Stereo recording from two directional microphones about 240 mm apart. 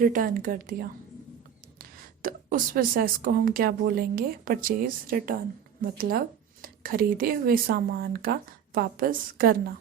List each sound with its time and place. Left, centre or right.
0.0 s a woman's voice: right